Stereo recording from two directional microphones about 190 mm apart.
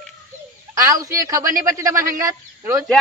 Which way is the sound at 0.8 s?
15° right (ahead or behind).